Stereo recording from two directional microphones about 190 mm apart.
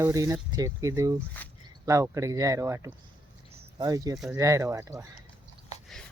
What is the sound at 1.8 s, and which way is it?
Speech, 15° right (ahead or behind).